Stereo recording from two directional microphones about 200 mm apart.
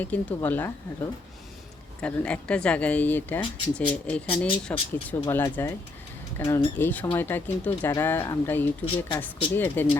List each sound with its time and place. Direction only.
0.0 s speech: 10° left (ahead or behind)
2.0 s speech: 5° left (ahead or behind)
8.8 s speech: 25° left (ahead or behind)
9.6 s speech: 10° left (ahead or behind)